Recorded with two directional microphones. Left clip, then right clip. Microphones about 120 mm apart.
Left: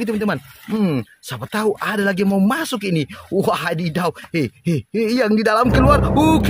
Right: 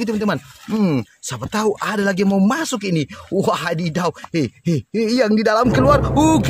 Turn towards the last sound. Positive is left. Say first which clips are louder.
# even
turn(degrees=0)  # may be behind; listen again after turning